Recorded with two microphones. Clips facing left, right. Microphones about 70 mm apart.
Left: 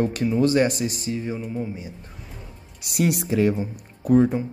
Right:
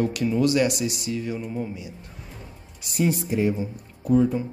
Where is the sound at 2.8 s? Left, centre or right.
Left.